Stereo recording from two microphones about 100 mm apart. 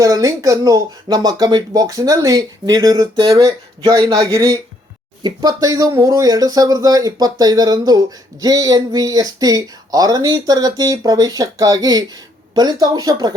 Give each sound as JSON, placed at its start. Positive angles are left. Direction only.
{"t": 0.0, "sound": "speech", "side_deg": -35}